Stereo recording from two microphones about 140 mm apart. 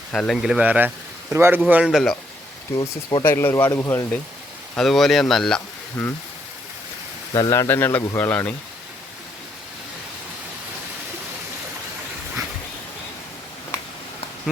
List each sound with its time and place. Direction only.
0.1 s speech: 5° left (ahead or behind)
0.5 s speech: 10° right (ahead or behind)
1.6 s speech: 5° right (ahead or behind)
2.7 s speech: 30° left (ahead or behind)
3.2 s speech: 15° left (ahead or behind)
4.8 s speech: centre (ahead or behind)
7.3 s speech: 25° left (ahead or behind)